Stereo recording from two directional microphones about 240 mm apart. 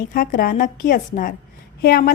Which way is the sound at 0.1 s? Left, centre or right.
Left.